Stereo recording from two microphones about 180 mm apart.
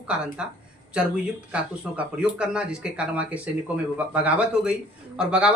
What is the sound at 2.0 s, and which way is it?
Speech, 5° right (ahead or behind).